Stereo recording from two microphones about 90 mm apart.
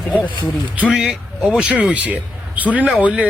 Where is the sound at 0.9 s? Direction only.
10° right (ahead or behind).